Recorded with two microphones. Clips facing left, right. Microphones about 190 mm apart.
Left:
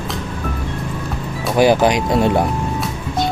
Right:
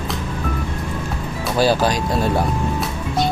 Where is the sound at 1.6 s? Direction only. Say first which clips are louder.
Left 4 dB; 20° left (ahead or behind).